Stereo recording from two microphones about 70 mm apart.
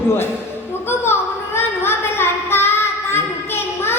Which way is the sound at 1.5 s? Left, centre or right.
Left.